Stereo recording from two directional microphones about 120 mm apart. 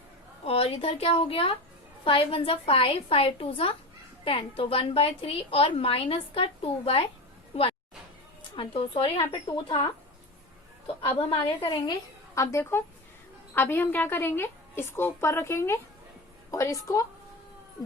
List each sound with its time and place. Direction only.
0.4 s a woman's voice: 55° left (ahead or behind)
11.0 s a woman's voice: 55° left (ahead or behind)
11.7 s a woman's voice: 30° left (ahead or behind)